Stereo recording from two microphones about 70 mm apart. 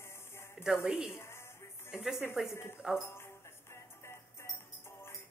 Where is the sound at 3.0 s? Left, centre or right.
Left.